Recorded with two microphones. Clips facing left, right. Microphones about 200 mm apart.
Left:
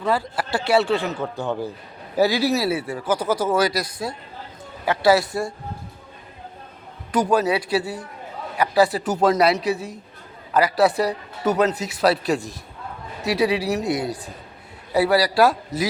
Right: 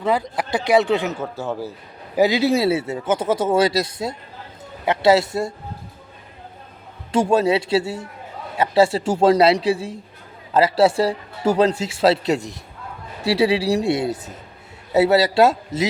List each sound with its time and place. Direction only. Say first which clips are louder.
0.0 s speech: right 2 dB; 20° right (ahead or behind)
1.2 s a man's voice: left 1 dB; 5° right (ahead or behind)
2.1 s speech: right 2 dB; 20° right (ahead or behind)
7.1 s speech: right 2 dB; 25° right (ahead or behind)